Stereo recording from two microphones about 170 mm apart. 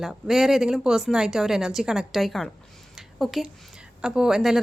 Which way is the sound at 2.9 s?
Centre (ahead or behind).